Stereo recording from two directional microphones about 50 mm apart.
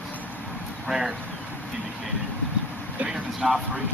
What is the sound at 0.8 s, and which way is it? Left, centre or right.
Speech, centre.